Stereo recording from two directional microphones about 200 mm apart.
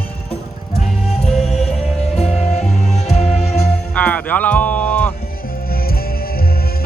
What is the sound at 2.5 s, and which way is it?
Music, 35° left (ahead or behind).